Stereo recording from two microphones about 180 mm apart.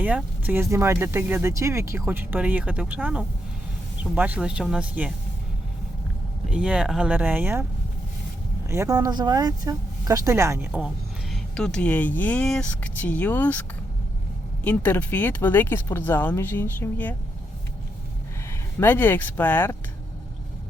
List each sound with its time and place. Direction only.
0.0 s speech: 10° right (ahead or behind)
6.5 s speech: 5° right (ahead or behind)
8.6 s speech: 15° right (ahead or behind)
11.5 s speech: 5° left (ahead or behind)
18.8 s speech: 10° left (ahead or behind)